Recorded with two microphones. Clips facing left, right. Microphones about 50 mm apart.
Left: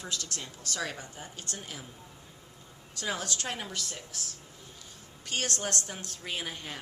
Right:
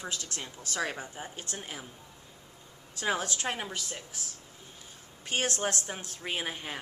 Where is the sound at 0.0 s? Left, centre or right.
Right.